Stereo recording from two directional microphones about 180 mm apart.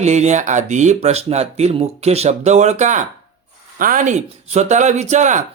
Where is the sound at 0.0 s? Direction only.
40° right (ahead or behind).